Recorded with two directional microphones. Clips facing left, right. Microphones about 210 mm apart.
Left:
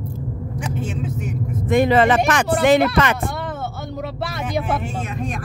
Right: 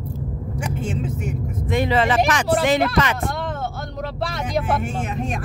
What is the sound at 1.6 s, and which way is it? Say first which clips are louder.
Speech: left 5 dB; 50° left (ahead or behind).